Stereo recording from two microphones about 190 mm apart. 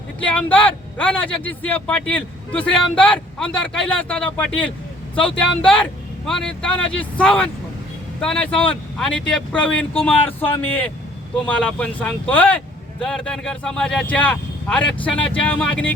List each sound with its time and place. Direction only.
0.2 s speech: 5° left (ahead or behind)